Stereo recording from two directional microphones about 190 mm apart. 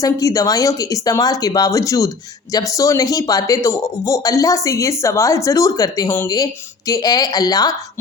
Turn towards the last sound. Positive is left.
turn(degrees=20)  # may be behind; listen again after turning